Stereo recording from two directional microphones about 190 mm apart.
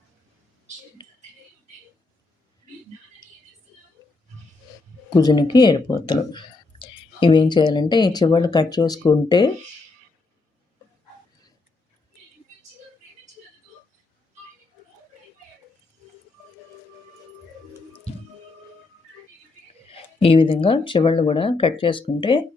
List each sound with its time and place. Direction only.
5.1 s speech: 20° left (ahead or behind)
19.9 s speech: 30° left (ahead or behind)